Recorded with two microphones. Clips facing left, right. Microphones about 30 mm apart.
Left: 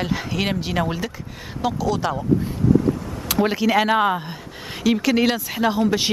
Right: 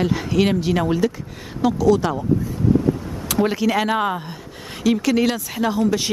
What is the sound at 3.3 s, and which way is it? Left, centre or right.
Speech, centre.